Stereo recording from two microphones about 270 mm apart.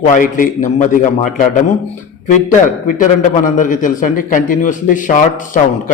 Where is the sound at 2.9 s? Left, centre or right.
Left.